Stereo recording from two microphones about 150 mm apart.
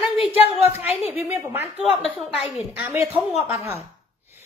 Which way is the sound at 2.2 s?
10° right (ahead or behind).